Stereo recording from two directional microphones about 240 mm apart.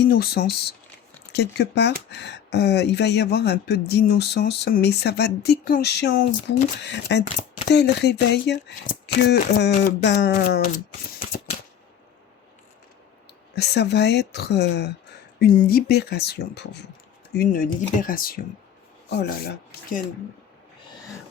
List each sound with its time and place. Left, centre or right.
0.0 s speech: left
11.2 s shuffling cards: left
13.6 s speech: left